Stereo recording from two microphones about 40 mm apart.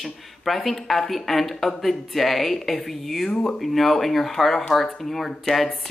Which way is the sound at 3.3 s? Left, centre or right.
Centre.